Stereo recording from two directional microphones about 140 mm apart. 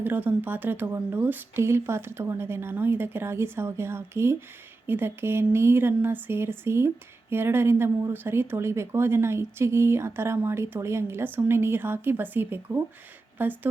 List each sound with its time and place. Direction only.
0.0 s speech: 10° right (ahead or behind)